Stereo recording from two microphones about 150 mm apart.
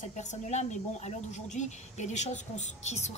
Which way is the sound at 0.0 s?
50° left (ahead or behind).